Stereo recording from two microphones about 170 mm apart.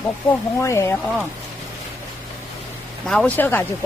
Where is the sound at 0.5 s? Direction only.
15° left (ahead or behind).